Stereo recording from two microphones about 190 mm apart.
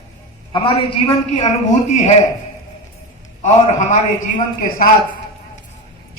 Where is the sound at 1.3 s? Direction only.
35° left (ahead or behind).